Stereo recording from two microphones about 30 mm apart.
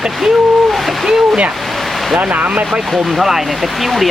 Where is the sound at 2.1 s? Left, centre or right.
Right.